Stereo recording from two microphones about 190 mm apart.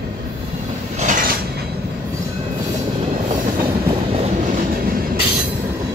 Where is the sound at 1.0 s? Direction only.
40° right (ahead or behind).